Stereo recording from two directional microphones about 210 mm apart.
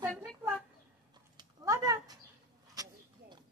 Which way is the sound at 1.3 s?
15° right (ahead or behind).